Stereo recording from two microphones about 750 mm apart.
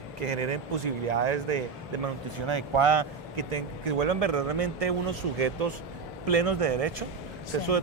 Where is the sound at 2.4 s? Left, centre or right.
Right.